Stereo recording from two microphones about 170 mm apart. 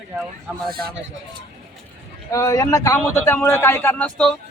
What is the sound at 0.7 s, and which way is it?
Speech, 60° right (ahead or behind).